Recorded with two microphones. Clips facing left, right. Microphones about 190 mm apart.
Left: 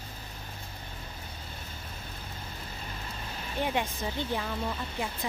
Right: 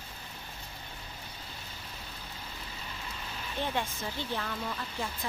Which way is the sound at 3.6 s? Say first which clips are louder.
Left 3 dB; 15° left (ahead or behind).